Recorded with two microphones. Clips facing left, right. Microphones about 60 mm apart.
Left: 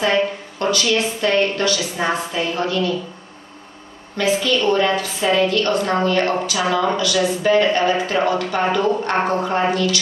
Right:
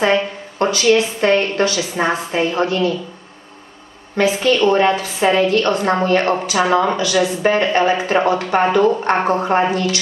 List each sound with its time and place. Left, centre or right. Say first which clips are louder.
0.0 s a woman's voice: right 2 dB; right
4.2 s a woman's voice: right 4 dB; right